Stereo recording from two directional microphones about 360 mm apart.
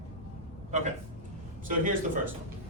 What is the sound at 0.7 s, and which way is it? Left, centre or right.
Speech, centre.